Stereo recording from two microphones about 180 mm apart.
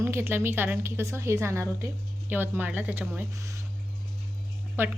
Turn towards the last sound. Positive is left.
turn(degrees=-10)  # may be behind; listen again after turning